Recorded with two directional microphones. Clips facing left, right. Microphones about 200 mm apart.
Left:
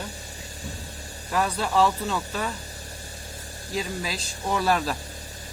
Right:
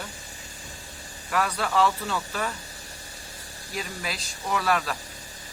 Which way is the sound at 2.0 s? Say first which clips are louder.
Left 1 dB; 10° left (ahead or behind).